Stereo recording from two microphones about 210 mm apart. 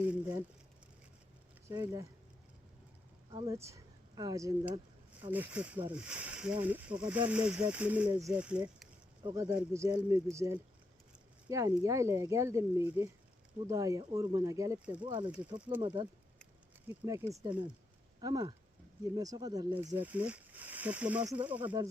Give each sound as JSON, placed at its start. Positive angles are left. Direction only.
{"t": 0.0, "sound": "speech", "side_deg": -10}
{"t": 1.6, "sound": "speech", "side_deg": -15}
{"t": 3.3, "sound": "speech", "side_deg": -15}
{"t": 9.2, "sound": "speech", "side_deg": -15}
{"t": 16.9, "sound": "speech", "side_deg": -10}